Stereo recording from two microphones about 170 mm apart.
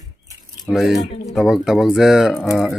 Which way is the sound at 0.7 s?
Centre (ahead or behind).